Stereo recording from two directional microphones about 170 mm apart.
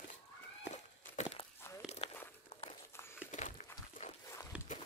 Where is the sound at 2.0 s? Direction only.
35° left (ahead or behind).